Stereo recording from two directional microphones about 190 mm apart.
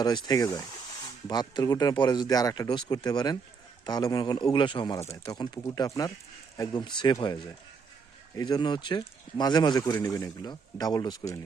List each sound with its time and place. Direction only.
0.0 s speech: 20° left (ahead or behind)
8.4 s speech: 20° left (ahead or behind)